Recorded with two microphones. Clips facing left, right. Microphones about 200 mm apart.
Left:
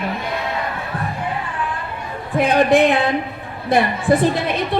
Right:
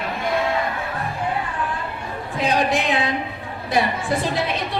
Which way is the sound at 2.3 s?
55° left (ahead or behind).